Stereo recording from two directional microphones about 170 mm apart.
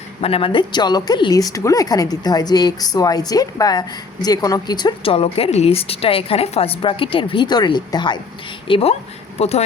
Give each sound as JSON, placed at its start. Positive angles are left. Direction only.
{"t": 0.2, "sound": "a woman's voice", "side_deg": 35}